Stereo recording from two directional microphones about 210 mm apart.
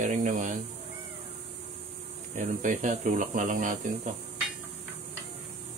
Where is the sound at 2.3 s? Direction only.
35° right (ahead or behind).